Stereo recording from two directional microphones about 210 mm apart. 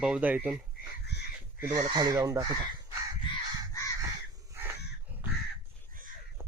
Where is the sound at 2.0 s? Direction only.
15° right (ahead or behind).